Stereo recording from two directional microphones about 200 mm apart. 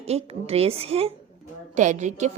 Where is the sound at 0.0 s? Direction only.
30° right (ahead or behind).